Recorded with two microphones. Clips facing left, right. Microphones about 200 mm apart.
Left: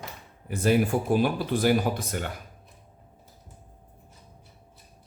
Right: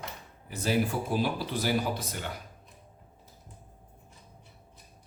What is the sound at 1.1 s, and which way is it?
Speech, 55° left (ahead or behind).